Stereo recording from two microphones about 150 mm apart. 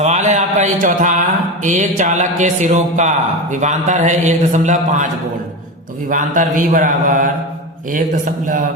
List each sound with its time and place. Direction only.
0.0 s a sound: 50° right (ahead or behind)
1.6 s a man's voice: 55° right (ahead or behind)
6.1 s a man's voice: 60° right (ahead or behind)